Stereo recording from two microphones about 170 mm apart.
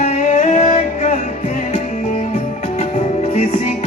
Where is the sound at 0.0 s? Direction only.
45° left (ahead or behind).